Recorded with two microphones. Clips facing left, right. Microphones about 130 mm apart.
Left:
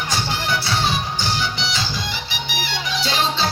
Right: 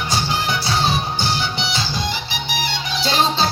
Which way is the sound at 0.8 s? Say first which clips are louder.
Right 2 dB; 90° left.